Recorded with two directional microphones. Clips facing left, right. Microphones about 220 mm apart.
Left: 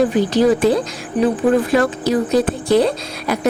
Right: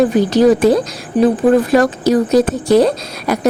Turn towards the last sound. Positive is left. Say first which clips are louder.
# right 3 dB
turn(degrees=-40)  # may be behind; listen again after turning